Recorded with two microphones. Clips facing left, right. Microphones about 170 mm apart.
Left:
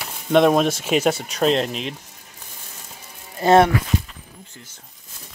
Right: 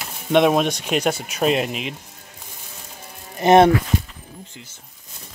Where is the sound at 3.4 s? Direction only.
20° right (ahead or behind).